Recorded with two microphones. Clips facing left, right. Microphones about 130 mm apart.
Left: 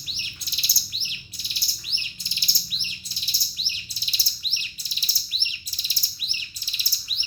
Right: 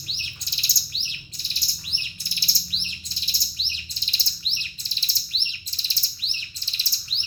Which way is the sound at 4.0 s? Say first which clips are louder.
Right 1 dB; 10° left (ahead or behind).